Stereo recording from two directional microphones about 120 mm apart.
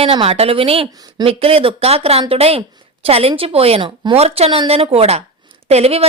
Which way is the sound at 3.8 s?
40° right (ahead or behind).